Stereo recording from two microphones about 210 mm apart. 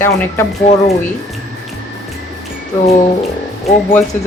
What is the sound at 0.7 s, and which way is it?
Speech, 30° left (ahead or behind).